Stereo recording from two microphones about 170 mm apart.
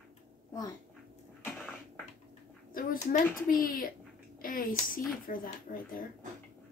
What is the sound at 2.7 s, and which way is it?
Speech, 50° left (ahead or behind).